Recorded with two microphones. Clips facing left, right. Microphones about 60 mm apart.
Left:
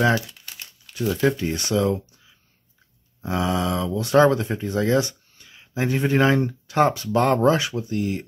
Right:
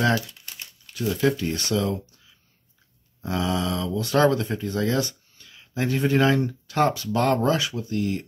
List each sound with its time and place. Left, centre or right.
0.9 s speech: left
3.2 s speech: left
8.0 s speech: centre